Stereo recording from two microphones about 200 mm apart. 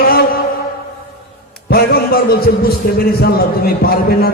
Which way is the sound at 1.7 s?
50° left (ahead or behind).